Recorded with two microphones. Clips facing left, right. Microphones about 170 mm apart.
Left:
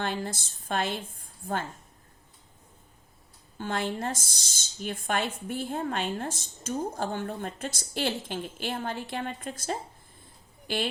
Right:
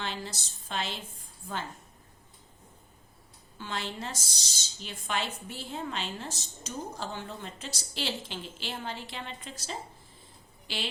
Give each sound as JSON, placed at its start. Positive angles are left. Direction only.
{"t": 0.0, "sound": "a woman's voice", "side_deg": 50}
{"t": 3.6, "sound": "a woman's voice", "side_deg": 50}